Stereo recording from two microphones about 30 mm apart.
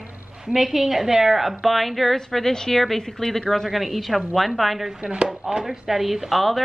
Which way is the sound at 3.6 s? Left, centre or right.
Centre.